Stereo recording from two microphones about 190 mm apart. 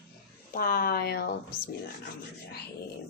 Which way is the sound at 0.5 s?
50° left (ahead or behind).